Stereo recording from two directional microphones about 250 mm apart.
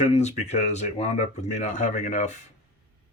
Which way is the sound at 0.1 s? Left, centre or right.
Left.